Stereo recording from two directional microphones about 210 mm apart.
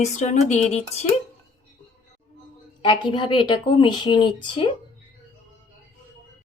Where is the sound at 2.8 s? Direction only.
20° left (ahead or behind).